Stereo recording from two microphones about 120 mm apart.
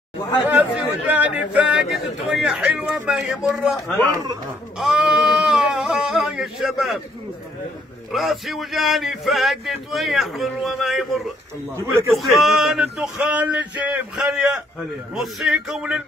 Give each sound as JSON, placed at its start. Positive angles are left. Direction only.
{"t": 1.1, "sound": "speech", "side_deg": -10}
{"t": 4.1, "sound": "speech", "side_deg": -30}
{"t": 4.7, "sound": "speech", "side_deg": -5}
{"t": 8.1, "sound": "speech", "side_deg": 0}
{"t": 11.8, "sound": "speech", "side_deg": -20}
{"t": 12.2, "sound": "speech", "side_deg": 0}